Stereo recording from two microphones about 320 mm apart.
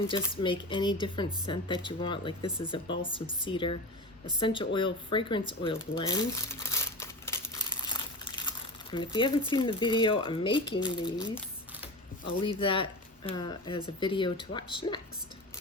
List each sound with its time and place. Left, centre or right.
0.1 s speech: centre
5.9 s crumpling: centre
10.8 s speech: centre
12.4 s speech: centre